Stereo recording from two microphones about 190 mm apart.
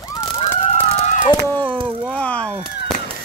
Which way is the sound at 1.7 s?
25° right (ahead or behind).